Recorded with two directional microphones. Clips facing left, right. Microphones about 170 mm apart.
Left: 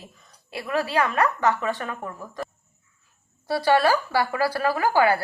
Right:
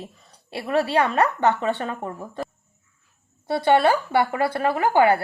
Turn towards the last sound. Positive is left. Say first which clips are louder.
# right 2 dB
turn(degrees=-25)  # may be behind; listen again after turning